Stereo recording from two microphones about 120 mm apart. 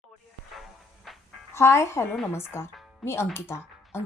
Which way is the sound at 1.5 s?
20° left (ahead or behind).